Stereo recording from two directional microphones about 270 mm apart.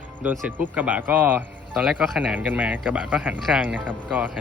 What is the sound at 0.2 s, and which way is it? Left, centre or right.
Speech, centre.